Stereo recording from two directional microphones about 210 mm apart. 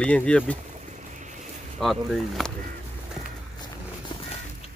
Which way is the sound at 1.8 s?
Centre (ahead or behind).